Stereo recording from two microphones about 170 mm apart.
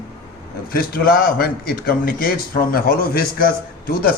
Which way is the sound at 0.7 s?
60° left (ahead or behind).